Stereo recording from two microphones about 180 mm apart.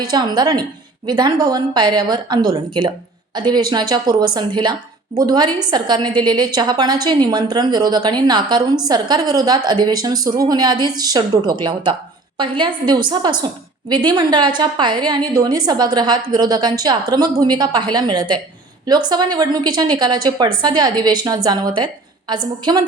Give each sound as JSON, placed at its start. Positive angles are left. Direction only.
{"t": 0.1, "sound": "a woman's voice", "side_deg": -25}